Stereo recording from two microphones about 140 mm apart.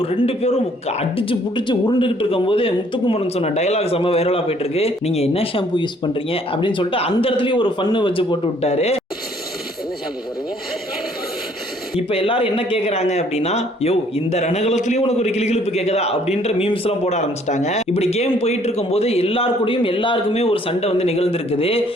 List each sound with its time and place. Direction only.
0.0 s speech: 45° left (ahead or behind)
11.9 s speech: 40° left (ahead or behind)